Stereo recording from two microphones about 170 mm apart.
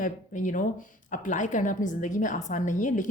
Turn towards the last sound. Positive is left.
turn(degrees=50)  # may be behind; listen again after turning